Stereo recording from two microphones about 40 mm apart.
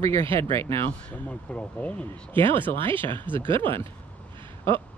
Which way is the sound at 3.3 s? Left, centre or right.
Right.